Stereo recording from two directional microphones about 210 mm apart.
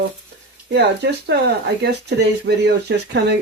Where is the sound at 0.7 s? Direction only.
55° right (ahead or behind).